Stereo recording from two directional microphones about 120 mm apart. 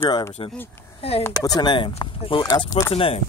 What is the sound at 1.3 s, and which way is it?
Speech, 30° left (ahead or behind).